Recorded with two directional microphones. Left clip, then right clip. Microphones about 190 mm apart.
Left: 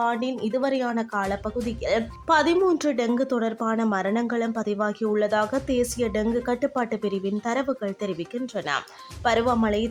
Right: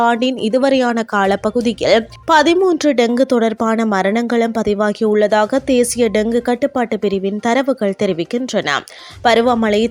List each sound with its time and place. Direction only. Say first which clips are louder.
0.0 s speech: right 10 dB; 40° right (ahead or behind)